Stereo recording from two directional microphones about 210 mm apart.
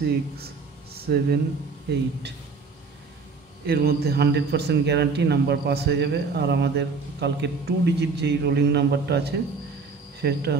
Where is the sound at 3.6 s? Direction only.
50° right (ahead or behind).